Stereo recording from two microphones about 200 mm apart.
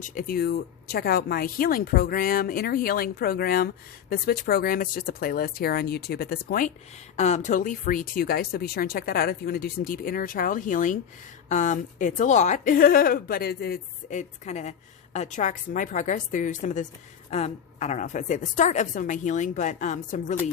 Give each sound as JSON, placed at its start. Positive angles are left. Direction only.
{"t": 0.0, "sound": "a woman's voice", "side_deg": 45}